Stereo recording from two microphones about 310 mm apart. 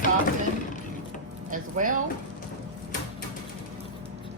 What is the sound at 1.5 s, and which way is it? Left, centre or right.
Speech, right.